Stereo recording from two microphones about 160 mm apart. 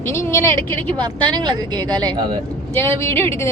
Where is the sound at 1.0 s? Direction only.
25° right (ahead or behind).